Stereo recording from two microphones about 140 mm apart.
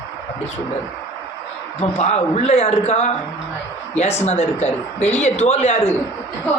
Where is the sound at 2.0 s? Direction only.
50° left (ahead or behind).